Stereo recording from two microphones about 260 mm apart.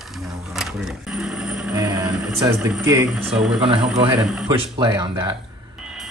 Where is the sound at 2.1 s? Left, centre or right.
Centre.